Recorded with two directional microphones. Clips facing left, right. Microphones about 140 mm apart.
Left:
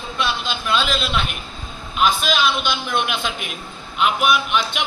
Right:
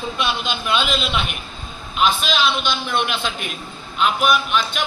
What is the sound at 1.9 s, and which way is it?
A man's voice, 5° left (ahead or behind).